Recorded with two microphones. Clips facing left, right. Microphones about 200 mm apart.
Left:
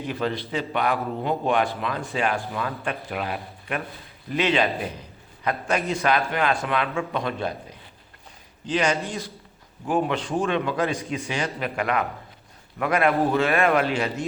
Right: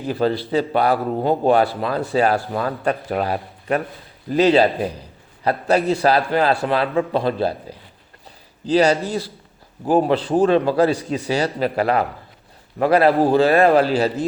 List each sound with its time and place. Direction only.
0.0 s speech: 35° right (ahead or behind)